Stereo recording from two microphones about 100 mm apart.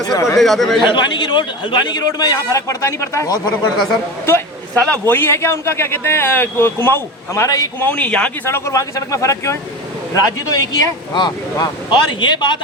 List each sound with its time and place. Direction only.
0.3 s speech: centre (ahead or behind)
0.8 s a man's voice: 50° left (ahead or behind)
4.3 s a sound: 25° left (ahead or behind)
4.8 s a man's voice: 15° left (ahead or behind)
5.1 s a man's voice: 25° left (ahead or behind)
7.8 s a man's voice: 15° left (ahead or behind)
8.4 s a man's voice: 25° left (ahead or behind); by 12.5 s 50° left (ahead or behind)